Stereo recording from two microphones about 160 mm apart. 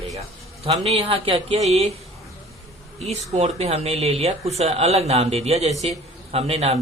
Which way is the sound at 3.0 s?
40° right (ahead or behind).